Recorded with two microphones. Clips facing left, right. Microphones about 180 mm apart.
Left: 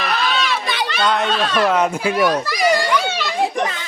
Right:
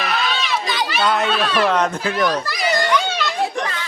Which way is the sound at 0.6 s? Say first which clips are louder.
Even; 60° left (ahead or behind).